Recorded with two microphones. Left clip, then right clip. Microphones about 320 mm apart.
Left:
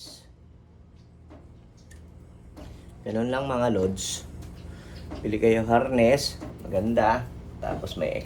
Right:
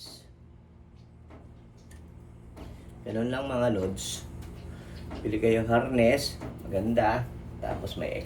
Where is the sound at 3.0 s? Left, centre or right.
Left.